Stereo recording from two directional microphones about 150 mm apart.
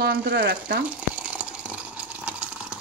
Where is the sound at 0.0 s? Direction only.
90° right.